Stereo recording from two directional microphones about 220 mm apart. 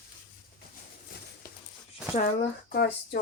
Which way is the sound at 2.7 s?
45° left (ahead or behind).